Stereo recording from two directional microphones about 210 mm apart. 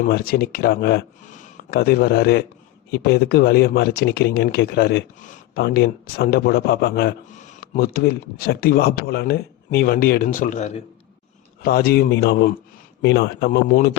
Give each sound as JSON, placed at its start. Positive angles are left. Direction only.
{"t": 0.0, "sound": "speech", "side_deg": 45}
{"t": 11.6, "sound": "speech", "side_deg": 45}